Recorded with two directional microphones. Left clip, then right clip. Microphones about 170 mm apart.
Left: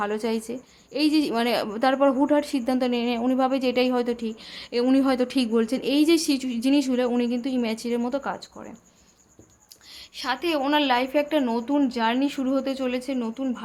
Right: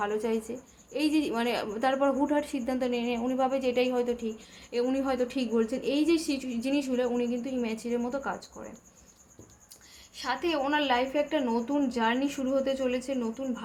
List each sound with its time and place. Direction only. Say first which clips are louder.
0.0 s a woman's voice: left 3 dB; 30° left (ahead or behind)
9.9 s a woman's voice: left 4 dB; 30° left (ahead or behind)